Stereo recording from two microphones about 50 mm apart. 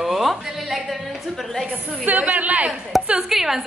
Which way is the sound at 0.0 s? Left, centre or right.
Centre.